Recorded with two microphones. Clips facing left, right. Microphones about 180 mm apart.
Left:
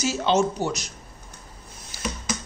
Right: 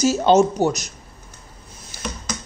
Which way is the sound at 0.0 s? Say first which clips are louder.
Right 7 dB; 40° right (ahead or behind).